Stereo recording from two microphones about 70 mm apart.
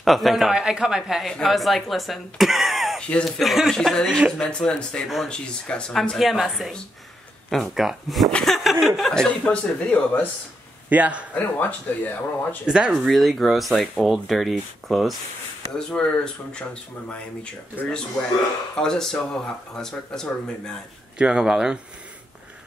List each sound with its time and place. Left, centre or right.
0.0 s speech: centre
5.0 s speech: centre
5.3 s speech: centre
6.1 s speech: centre
8.3 s speech: centre
8.5 s speech: centre
9.1 s speech: centre
10.9 s a man's voice: right
11.3 s speech: left
12.6 s speech: centre
13.1 s speech: centre
15.7 s speech: centre
18.8 s speech: centre
21.2 s speech: centre